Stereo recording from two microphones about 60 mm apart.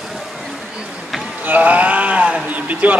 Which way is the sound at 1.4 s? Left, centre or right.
Right.